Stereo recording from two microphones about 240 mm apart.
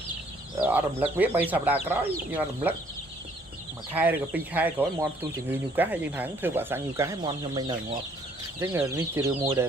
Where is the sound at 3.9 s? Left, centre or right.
Centre.